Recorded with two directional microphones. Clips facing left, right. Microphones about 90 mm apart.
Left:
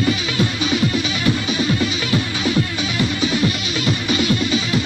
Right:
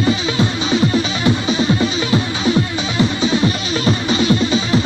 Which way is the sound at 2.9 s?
25° right (ahead or behind).